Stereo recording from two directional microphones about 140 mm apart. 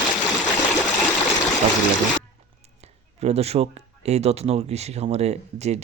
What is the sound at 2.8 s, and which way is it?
Speech, 50° right (ahead or behind).